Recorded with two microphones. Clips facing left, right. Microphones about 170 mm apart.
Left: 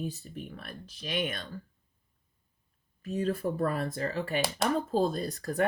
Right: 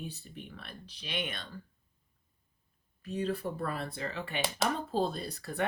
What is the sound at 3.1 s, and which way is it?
Speech, 45° left (ahead or behind).